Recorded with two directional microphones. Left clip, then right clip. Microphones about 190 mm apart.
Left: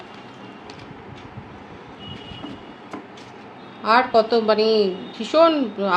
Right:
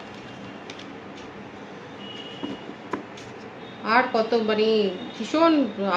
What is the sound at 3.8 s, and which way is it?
A woman's voice, 60° left (ahead or behind).